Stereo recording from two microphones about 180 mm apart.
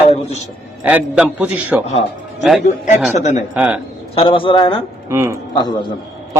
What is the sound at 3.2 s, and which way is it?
Speech, 40° left (ahead or behind).